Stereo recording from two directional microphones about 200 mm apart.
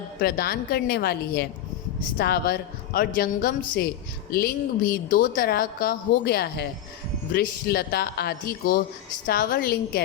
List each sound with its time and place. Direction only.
0.2 s a woman's voice: 50° left (ahead or behind)